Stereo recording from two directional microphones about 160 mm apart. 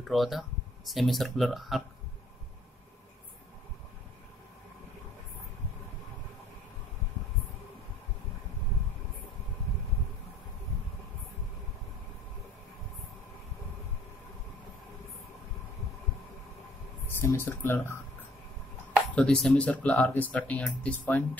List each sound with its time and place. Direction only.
0.0 s speech: centre (ahead or behind)
17.2 s speech: 15° left (ahead or behind)
19.1 s speech: 5° left (ahead or behind)